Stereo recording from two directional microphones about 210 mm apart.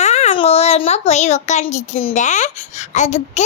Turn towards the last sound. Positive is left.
turn(degrees=35)  # may be behind; listen again after turning